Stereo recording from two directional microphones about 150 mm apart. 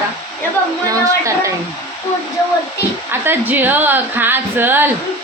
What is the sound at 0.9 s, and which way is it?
Speech, 20° right (ahead or behind).